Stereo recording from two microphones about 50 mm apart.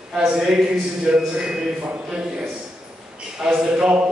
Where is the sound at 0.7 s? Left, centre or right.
Centre.